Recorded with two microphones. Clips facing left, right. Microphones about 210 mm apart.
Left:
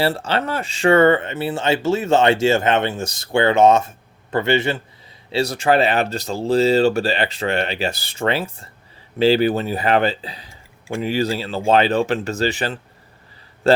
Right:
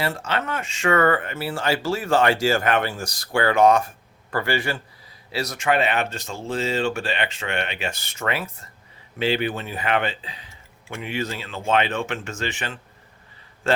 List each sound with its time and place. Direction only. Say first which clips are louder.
0.0 s speech: left 6 dB; 35° left (ahead or behind)